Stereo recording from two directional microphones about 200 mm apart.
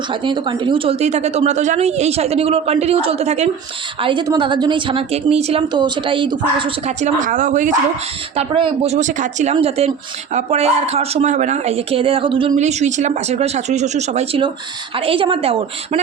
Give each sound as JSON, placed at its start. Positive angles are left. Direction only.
{"t": 0.1, "sound": "speech", "side_deg": -25}
{"t": 4.0, "sound": "a woman's voice", "side_deg": -25}
{"t": 8.4, "sound": "a woman's voice", "side_deg": -30}